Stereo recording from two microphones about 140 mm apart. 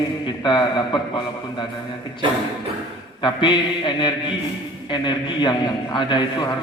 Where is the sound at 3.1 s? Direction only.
35° left (ahead or behind).